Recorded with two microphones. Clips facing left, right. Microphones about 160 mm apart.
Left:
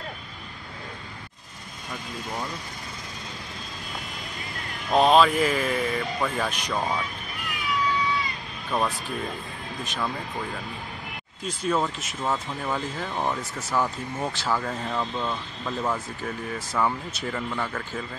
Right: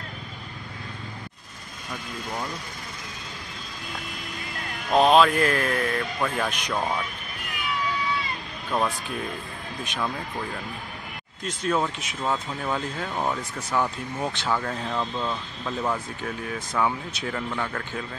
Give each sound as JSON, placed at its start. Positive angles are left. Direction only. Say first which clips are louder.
{"t": 4.9, "sound": "speech", "louder": "right 1 dB", "side_deg": 0}
{"t": 8.7, "sound": "speech", "louder": "even", "side_deg": 0}